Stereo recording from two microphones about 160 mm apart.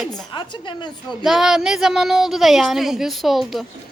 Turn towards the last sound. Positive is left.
turn(degrees=0)  # may be behind; listen again after turning